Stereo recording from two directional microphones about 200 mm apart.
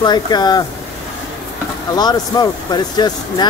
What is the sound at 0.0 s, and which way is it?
Speech, 20° left (ahead or behind).